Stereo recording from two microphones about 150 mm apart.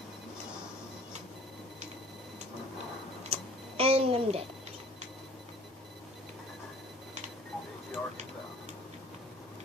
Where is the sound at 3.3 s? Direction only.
40° right (ahead or behind).